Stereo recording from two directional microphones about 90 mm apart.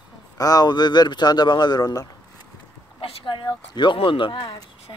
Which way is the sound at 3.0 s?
75° left (ahead or behind).